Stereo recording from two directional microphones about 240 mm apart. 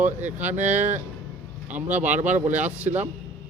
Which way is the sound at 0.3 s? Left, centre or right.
Centre.